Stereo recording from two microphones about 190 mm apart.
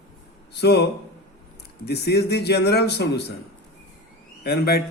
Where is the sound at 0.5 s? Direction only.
60° left (ahead or behind).